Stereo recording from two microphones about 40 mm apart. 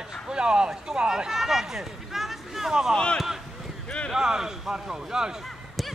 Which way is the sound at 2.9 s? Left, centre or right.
Centre.